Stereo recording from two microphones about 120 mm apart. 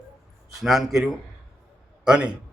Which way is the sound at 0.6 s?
Centre (ahead or behind).